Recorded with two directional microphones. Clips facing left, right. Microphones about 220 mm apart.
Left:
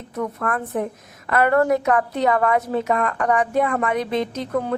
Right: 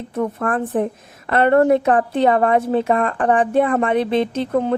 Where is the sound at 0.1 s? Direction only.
30° right (ahead or behind).